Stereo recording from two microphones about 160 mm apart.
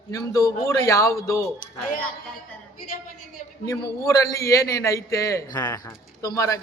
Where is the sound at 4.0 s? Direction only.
20° left (ahead or behind).